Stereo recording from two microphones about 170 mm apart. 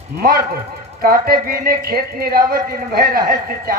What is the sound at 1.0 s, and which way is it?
A man's voice, 60° right (ahead or behind).